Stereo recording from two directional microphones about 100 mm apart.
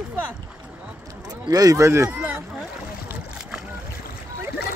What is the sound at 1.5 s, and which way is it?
Speech, 35° right (ahead or behind).